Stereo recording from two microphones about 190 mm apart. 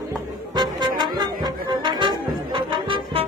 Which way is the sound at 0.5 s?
20° right (ahead or behind).